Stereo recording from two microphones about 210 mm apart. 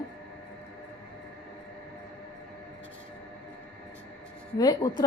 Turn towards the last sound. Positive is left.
turn(degrees=20)  # may be behind; listen again after turning